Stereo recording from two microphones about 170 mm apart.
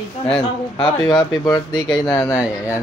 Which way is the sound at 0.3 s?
35° left (ahead or behind).